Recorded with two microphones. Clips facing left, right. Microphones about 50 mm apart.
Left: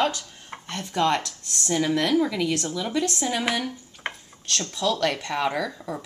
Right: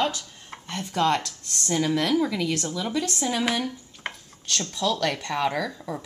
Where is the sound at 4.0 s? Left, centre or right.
Centre.